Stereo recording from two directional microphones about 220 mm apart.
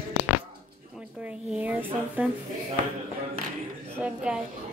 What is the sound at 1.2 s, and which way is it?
Speech, 5° right (ahead or behind).